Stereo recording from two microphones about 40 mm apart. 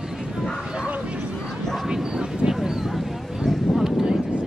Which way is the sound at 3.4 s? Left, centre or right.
Centre.